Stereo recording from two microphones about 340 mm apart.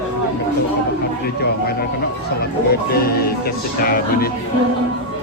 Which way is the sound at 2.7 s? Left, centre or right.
Left.